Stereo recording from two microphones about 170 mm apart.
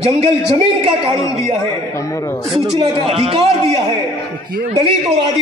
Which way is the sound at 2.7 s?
35° right (ahead or behind).